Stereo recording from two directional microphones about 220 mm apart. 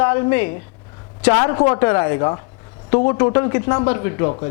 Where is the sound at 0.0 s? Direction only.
15° left (ahead or behind).